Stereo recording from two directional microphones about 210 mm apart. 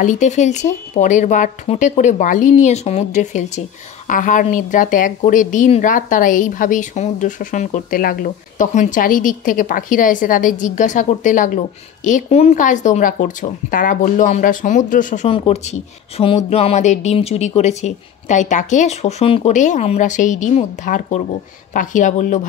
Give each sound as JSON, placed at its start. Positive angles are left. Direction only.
{"t": 0.0, "sound": "a woman's voice", "side_deg": 35}